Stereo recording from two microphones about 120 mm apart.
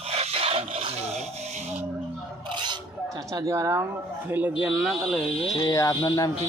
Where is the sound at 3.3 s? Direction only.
25° right (ahead or behind).